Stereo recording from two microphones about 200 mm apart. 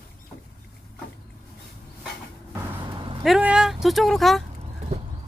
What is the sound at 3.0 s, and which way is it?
Vehicle, 25° right (ahead or behind).